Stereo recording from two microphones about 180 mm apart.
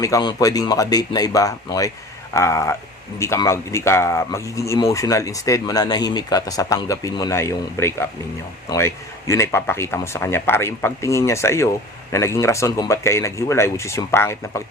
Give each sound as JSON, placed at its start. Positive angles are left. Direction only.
{"t": 0.0, "sound": "speech", "side_deg": 20}